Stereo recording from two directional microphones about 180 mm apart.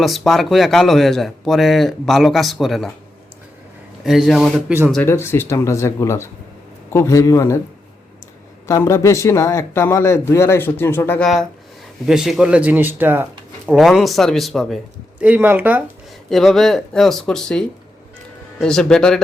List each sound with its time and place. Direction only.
0.0 s speech: centre (ahead or behind)
4.0 s speech: centre (ahead or behind)
4.9 s speech: 10° left (ahead or behind)
8.6 s speech: 15° left (ahead or behind)
12.0 s speech: 5° right (ahead or behind)
16.3 s speech: centre (ahead or behind)